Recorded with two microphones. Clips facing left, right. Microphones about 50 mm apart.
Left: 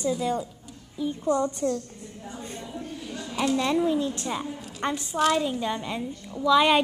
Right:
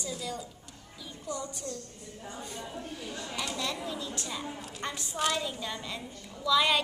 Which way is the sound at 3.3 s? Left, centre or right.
Left.